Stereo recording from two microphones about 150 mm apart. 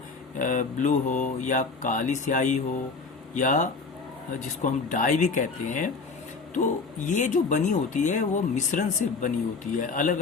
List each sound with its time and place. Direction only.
0.3 s speech: 60° left (ahead or behind)